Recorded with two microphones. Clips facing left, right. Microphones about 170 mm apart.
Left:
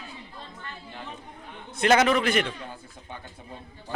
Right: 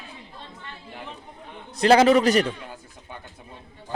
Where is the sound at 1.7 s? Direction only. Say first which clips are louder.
Right 5 dB; 35° right (ahead or behind).